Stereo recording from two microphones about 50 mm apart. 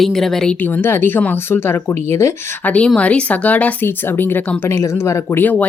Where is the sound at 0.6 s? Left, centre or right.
Left.